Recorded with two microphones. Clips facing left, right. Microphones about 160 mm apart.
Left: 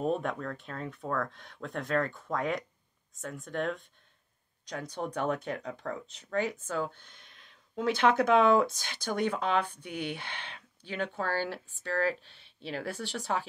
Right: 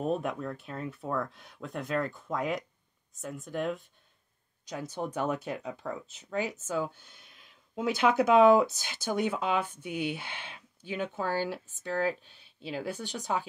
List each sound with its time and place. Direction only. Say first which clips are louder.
0.0 s speech: even; centre (ahead or behind)